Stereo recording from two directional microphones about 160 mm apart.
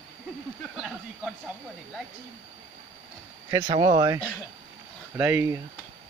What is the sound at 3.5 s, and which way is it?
Speech, 25° right (ahead or behind).